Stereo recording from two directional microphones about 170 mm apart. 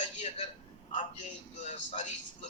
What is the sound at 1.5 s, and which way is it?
Speech, 45° left (ahead or behind).